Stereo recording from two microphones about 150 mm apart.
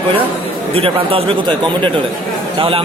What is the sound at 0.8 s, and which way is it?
Speech, 40° right (ahead or behind).